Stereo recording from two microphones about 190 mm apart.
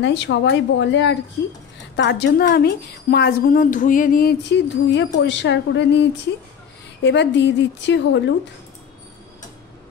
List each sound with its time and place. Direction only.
0.0 s a woman's voice: 70° left (ahead or behind)